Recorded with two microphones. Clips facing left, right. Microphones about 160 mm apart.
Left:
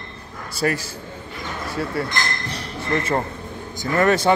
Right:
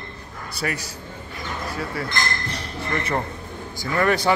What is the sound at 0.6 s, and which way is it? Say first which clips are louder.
Speech: left 6 dB; 30° left (ahead or behind).